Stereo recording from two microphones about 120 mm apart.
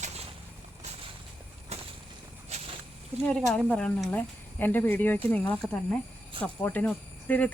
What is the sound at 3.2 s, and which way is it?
Speech, 5° left (ahead or behind).